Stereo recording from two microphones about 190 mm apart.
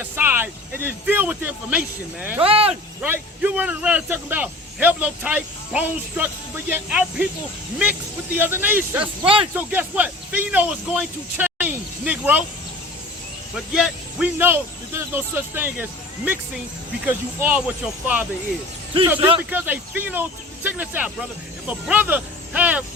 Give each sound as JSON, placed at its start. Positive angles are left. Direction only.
{"t": 0.0, "sound": "speech", "side_deg": -10}
{"t": 2.4, "sound": "speech", "side_deg": -30}
{"t": 3.0, "sound": "speech", "side_deg": -10}
{"t": 8.4, "sound": "speech", "side_deg": -10}
{"t": 9.2, "sound": "speech", "side_deg": -30}
{"t": 9.6, "sound": "speech", "side_deg": -10}
{"t": 13.7, "sound": "speech", "side_deg": -5}